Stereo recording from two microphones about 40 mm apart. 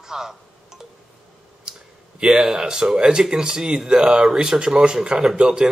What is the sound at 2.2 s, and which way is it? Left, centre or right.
Speech, centre.